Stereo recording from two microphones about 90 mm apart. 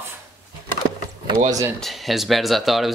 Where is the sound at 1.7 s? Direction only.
Centre (ahead or behind).